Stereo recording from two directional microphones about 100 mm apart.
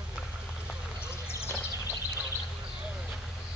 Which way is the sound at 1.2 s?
25° left (ahead or behind).